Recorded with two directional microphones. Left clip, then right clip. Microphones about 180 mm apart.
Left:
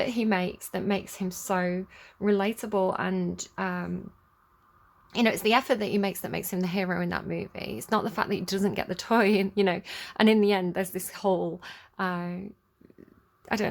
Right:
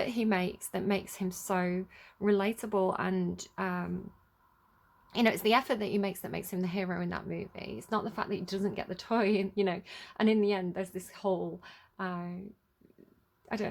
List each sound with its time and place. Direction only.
0.0 s speech: 10° left (ahead or behind)
5.1 s a woman's voice: 10° left (ahead or behind); by 12.5 s 25° left (ahead or behind)
13.4 s a sound: 25° left (ahead or behind)